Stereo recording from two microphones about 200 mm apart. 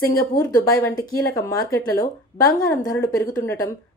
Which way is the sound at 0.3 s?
15° left (ahead or behind).